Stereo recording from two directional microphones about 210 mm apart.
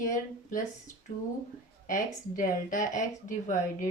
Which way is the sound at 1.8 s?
40° left (ahead or behind).